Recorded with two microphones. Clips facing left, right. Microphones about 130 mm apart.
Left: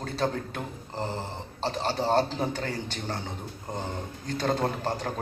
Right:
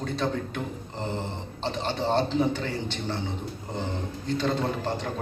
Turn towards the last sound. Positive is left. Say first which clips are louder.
# even
turn(degrees=40)  # may be behind; listen again after turning